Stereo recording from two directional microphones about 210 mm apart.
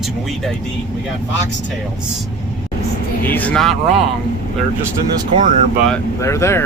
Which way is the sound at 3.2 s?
10° left (ahead or behind).